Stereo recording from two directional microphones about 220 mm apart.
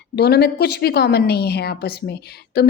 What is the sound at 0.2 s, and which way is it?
A woman's voice, 45° left (ahead or behind).